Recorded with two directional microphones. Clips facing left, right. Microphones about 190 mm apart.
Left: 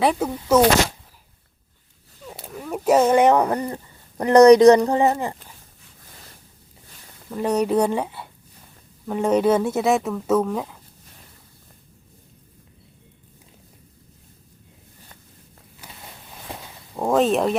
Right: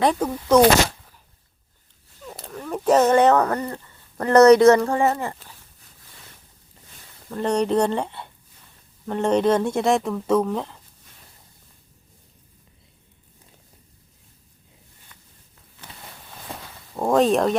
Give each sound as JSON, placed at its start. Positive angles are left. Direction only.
{"t": 0.0, "sound": "speech", "side_deg": 5}
{"t": 2.2, "sound": "a sound", "side_deg": 10}
{"t": 4.2, "sound": "speech", "side_deg": 15}
{"t": 7.3, "sound": "speech", "side_deg": 5}
{"t": 16.9, "sound": "speech", "side_deg": 0}